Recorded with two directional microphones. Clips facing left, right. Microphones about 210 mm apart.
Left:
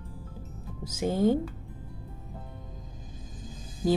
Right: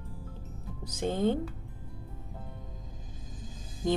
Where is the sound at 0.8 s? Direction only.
10° left (ahead or behind).